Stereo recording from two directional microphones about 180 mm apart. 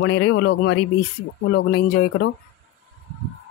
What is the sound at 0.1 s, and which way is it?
A man's voice, 85° left.